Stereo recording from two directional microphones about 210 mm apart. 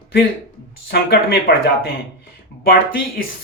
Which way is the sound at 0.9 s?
50° left (ahead or behind).